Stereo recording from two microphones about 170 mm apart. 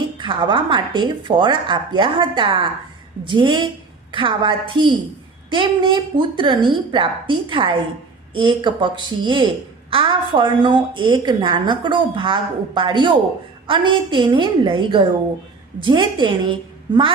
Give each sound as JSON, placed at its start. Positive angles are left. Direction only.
{"t": 0.2, "sound": "a woman's voice", "side_deg": -25}